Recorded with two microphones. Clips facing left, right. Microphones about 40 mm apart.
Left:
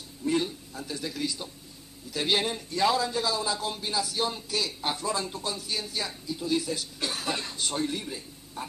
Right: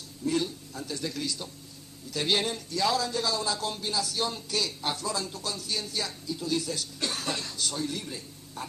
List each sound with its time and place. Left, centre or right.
0.2 s a man's voice: centre
2.7 s a man's voice: left
4.9 s a man's voice: left; by 7.3 s centre
7.3 s speech: left
8.0 s a man's voice: centre